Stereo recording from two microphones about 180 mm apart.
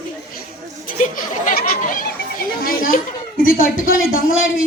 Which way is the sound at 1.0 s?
50° left (ahead or behind).